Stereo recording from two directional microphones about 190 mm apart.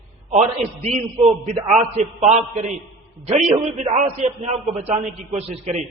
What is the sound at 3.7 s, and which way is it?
A man's voice, 35° right (ahead or behind).